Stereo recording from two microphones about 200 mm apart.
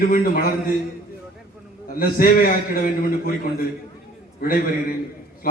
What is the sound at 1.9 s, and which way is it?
A man's voice, 45° left (ahead or behind).